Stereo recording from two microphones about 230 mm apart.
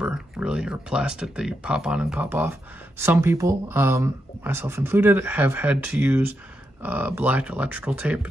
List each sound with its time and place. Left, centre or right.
0.0 s speech: centre